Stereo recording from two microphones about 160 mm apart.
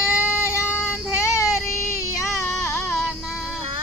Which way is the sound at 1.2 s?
20° left (ahead or behind).